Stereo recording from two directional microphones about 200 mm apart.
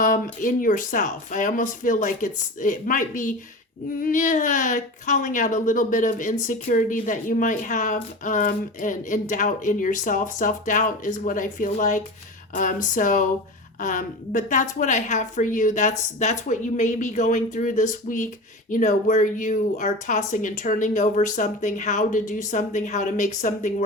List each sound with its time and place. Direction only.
0.0 s speech: 40° left (ahead or behind)